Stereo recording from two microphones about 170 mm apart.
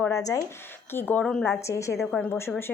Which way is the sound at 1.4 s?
15° left (ahead or behind).